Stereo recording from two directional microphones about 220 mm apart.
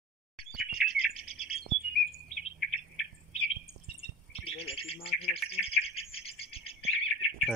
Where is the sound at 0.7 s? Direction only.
25° left (ahead or behind).